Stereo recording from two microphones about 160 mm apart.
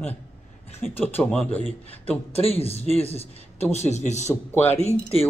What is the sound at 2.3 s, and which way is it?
A man's voice, 40° left (ahead or behind).